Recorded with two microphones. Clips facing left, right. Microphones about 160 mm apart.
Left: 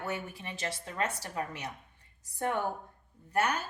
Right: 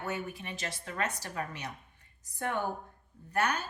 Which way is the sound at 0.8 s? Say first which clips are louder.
Right 1 dB; 25° left (ahead or behind).